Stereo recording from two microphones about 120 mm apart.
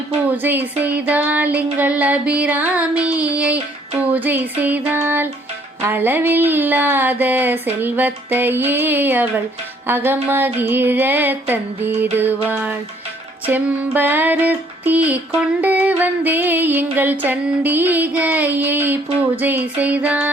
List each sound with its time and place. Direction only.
0.4 s music: 15° right (ahead or behind)